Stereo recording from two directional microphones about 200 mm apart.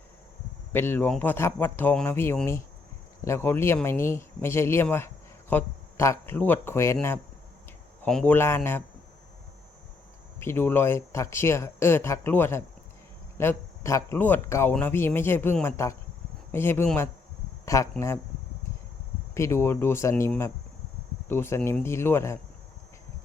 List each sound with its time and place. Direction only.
0.7 s speech: 10° left (ahead or behind)
10.4 s speech: 10° left (ahead or behind)
19.3 s speech: 15° left (ahead or behind)